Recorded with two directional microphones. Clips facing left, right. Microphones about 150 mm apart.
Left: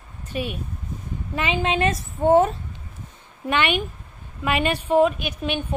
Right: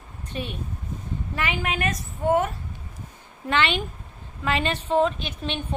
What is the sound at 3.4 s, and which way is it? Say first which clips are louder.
A woman's voice: left 2 dB; 15° left (ahead or behind).